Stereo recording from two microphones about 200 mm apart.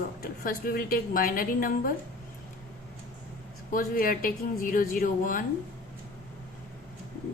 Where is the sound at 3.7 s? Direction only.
45° left (ahead or behind).